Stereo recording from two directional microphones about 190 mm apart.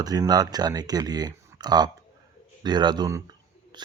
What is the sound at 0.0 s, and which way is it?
Speech, 20° right (ahead or behind).